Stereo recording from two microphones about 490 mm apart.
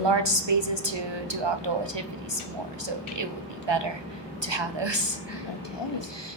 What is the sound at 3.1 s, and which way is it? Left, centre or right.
A woman's voice, right.